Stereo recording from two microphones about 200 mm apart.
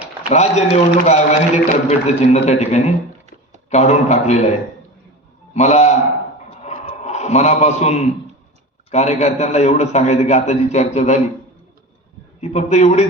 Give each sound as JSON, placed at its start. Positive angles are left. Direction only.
{"t": 0.3, "sound": "a man's voice", "side_deg": 35}
{"t": 5.5, "sound": "a man's voice", "side_deg": 35}
{"t": 6.6, "sound": "a sound", "side_deg": 30}
{"t": 8.9, "sound": "a man's voice", "side_deg": 35}
{"t": 12.4, "sound": "a man's voice", "side_deg": 35}